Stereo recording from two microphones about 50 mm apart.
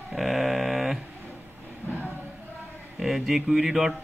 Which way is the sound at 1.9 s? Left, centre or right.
Left.